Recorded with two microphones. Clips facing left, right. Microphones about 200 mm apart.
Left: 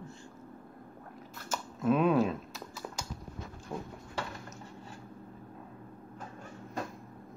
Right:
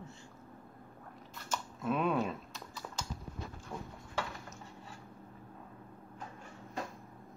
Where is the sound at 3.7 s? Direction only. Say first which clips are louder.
Left 5 dB; 15° left (ahead or behind).